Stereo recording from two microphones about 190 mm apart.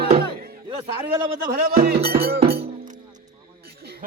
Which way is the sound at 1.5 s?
50° right (ahead or behind).